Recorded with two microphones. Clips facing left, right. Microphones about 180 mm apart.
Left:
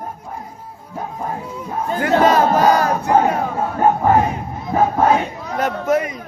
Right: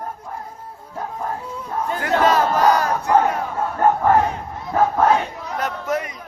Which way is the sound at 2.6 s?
25° left (ahead or behind).